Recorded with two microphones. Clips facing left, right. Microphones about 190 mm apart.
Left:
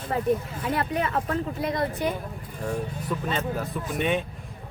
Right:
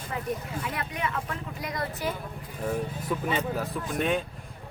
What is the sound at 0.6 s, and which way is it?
Speech, 35° left (ahead or behind).